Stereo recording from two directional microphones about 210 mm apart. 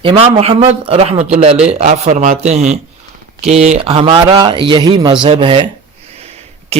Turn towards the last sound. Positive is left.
turn(degrees=-30)  # may be behind; listen again after turning